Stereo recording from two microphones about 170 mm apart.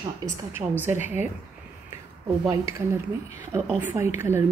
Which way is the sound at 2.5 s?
15° right (ahead or behind).